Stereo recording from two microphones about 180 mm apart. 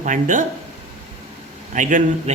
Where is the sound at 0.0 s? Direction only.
45° right (ahead or behind).